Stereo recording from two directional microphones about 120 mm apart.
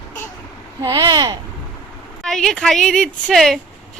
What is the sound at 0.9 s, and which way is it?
Speech, 35° right (ahead or behind).